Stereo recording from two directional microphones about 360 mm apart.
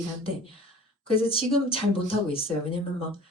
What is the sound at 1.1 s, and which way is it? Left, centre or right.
A woman's voice, centre.